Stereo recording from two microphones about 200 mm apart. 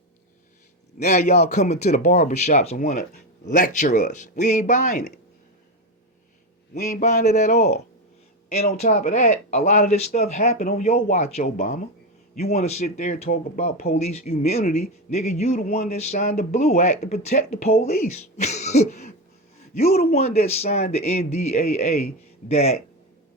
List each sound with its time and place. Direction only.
0.9 s speech: 35° left (ahead or behind)
6.7 s speech: 35° left (ahead or behind)
11.4 s speech: 45° left (ahead or behind)
12.5 s speech: 30° left (ahead or behind)